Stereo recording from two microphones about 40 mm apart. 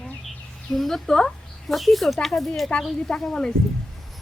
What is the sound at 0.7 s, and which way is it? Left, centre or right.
Speech, centre.